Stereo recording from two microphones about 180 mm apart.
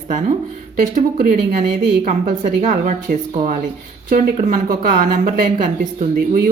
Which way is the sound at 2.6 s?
40° right (ahead or behind).